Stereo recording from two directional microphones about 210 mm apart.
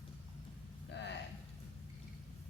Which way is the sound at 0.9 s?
55° left (ahead or behind).